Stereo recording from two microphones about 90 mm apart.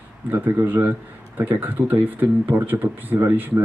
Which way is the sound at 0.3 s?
20° right (ahead or behind).